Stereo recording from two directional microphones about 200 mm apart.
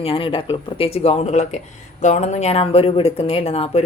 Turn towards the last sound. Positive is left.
turn(degrees=30)  # may be behind; listen again after turning